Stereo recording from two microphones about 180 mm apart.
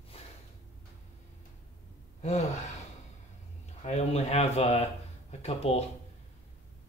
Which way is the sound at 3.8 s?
35° left (ahead or behind).